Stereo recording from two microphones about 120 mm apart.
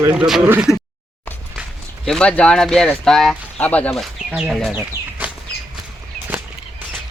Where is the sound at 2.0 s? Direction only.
5° left (ahead or behind).